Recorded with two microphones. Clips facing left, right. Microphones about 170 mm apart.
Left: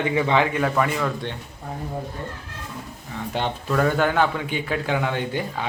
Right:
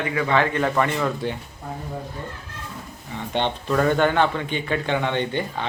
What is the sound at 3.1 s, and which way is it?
Speech, 5° left (ahead or behind).